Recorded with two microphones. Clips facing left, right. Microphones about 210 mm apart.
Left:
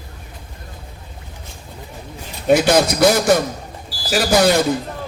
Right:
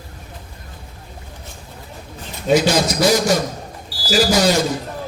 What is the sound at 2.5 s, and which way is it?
A man's voice, 55° left (ahead or behind).